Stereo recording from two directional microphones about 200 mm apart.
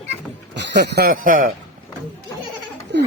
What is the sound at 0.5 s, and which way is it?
Speech, 60° right (ahead or behind).